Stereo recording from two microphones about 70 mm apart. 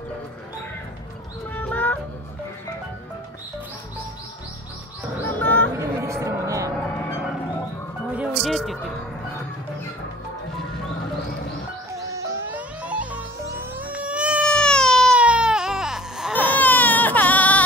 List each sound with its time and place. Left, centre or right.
1.5 s a sound: left
5.2 s bird: left
5.8 s a sound: right
6.7 s music: centre
8.4 s a sound: centre
12.0 s music: right
12.4 s music: right
13.7 s cat: right
14.5 s baby cry: centre
15.1 s baby cry: centre
16.3 s baby cry: left